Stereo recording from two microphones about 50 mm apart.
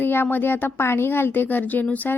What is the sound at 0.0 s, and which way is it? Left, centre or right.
Speech, left.